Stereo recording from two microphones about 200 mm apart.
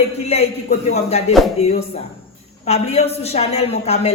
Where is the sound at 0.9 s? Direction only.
30° left (ahead or behind).